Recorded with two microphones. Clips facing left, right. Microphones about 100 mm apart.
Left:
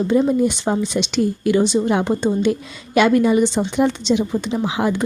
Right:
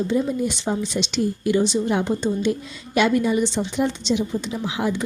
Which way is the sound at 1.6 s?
75° left (ahead or behind).